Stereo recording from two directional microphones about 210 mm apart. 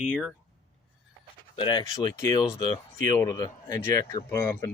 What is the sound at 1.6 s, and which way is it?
Speech, 20° left (ahead or behind).